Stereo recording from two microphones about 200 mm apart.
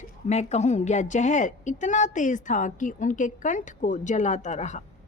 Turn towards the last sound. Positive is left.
turn(degrees=35)  # may be behind; listen again after turning